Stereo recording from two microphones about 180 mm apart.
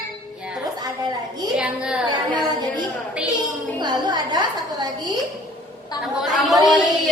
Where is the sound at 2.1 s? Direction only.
25° right (ahead or behind).